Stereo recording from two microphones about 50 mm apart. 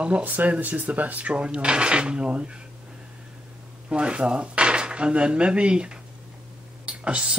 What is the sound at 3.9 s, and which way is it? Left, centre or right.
Dishes, right.